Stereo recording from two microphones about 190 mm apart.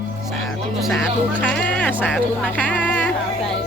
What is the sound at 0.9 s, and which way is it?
Music, 5° left (ahead or behind).